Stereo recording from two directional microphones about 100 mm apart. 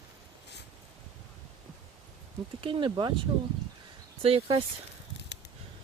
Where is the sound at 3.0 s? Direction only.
45° right (ahead or behind).